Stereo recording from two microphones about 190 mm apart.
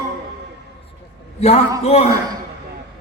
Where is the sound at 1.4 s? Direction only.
35° left (ahead or behind).